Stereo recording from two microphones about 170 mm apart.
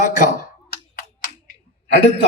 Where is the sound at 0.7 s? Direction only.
60° left (ahead or behind).